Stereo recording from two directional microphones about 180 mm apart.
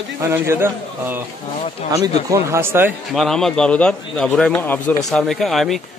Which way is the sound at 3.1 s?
Centre (ahead or behind).